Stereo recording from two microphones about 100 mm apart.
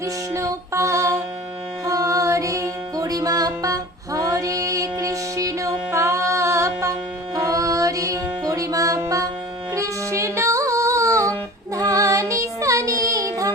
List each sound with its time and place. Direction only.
0.0 s music: 30° right (ahead or behind)